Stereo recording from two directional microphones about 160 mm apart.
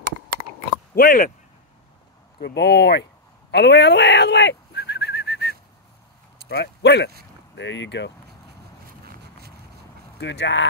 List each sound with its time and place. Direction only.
0.9 s speech: 60° left (ahead or behind)
2.4 s speech: 90° left
3.5 s whistling: 90° left
6.5 s speech: 90° left
8.8 s a sound: 70° right (ahead or behind)
10.1 s speech: 90° left